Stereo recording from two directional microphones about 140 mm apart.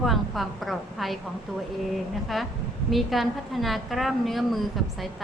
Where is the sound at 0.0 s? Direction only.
Centre (ahead or behind).